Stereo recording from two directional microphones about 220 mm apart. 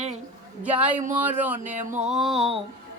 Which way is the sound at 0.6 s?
5° right (ahead or behind).